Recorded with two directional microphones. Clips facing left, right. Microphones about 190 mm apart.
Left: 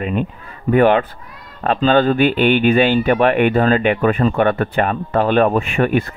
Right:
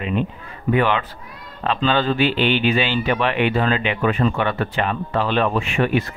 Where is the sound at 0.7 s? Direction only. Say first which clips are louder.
Left 6 dB; 45° left (ahead or behind).